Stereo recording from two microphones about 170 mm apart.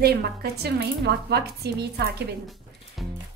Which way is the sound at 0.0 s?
70° right (ahead or behind).